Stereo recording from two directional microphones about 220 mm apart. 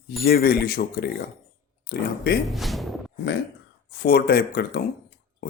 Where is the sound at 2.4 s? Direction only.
Centre (ahead or behind).